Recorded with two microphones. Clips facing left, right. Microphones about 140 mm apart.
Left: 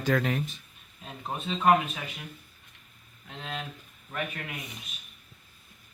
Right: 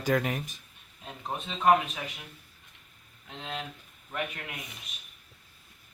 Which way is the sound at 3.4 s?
15° right (ahead or behind).